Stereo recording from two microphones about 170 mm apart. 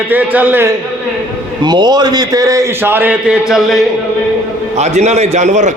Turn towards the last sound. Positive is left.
turn(degrees=-45)  # may be behind; listen again after turning